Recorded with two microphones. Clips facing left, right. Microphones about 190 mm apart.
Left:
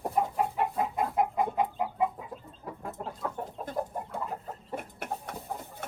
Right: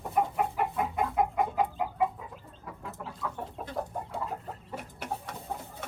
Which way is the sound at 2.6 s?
50° left (ahead or behind).